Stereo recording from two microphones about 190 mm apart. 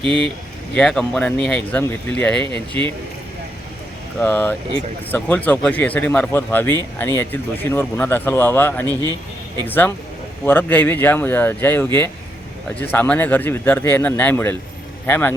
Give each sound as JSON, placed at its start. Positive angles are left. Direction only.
{"t": 0.7, "sound": "speech", "side_deg": 5}
{"t": 4.2, "sound": "speech", "side_deg": 10}
{"t": 8.9, "sound": "speech", "side_deg": -20}
{"t": 9.6, "sound": "speech", "side_deg": 10}